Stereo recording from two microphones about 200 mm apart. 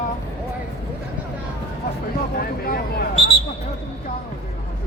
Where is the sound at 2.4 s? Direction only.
45° left (ahead or behind).